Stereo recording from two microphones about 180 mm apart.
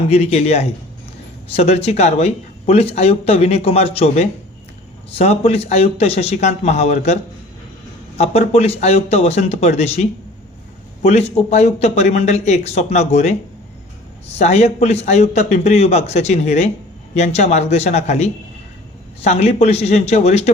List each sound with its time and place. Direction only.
0.1 s speech: 35° left (ahead or behind)
8.2 s speech: 35° left (ahead or behind)